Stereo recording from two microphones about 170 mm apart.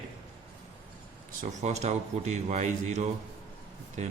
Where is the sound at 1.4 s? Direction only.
40° right (ahead or behind).